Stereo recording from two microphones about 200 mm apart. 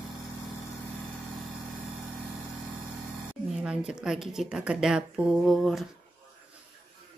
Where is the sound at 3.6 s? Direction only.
5° right (ahead or behind).